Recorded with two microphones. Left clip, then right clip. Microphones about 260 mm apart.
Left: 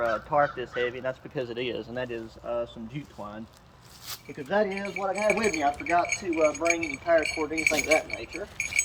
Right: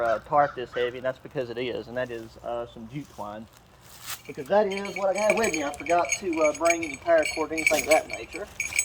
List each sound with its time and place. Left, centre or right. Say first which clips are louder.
0.0 s speech: right 2 dB; right
4.4 s speech: right 3 dB; right